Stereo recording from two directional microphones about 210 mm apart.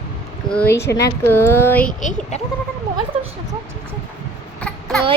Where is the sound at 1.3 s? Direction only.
10° left (ahead or behind).